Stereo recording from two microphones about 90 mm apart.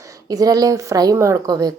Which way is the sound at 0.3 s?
45° right (ahead or behind).